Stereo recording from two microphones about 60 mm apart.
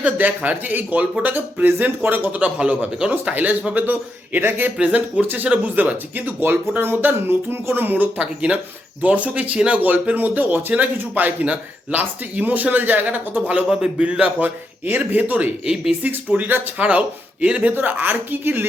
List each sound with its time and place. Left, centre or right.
0.0 s speech: right
3.8 s speech: right
4.8 s speech: centre
14.4 s speech: right
15.7 s speech: centre
16.0 s speech: right